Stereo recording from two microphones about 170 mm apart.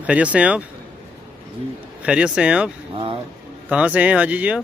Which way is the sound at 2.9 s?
30° right (ahead or behind).